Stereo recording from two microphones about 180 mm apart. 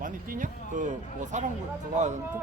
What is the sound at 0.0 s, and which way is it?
Speech, 45° right (ahead or behind).